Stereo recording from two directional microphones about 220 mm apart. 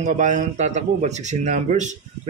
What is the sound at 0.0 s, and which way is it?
A man's voice, 35° right (ahead or behind).